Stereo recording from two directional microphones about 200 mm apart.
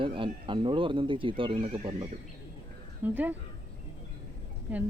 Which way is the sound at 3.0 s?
10° right (ahead or behind).